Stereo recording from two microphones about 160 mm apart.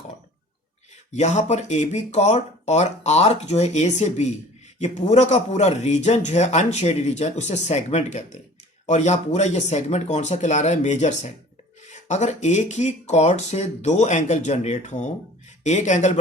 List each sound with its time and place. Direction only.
1.1 s speech: 45° left (ahead or behind)